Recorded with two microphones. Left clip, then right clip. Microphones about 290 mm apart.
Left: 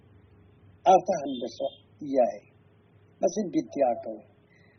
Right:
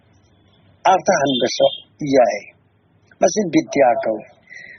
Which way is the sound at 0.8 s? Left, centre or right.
Right.